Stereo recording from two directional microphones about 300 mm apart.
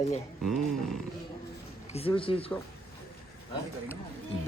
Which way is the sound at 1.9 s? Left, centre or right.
Centre.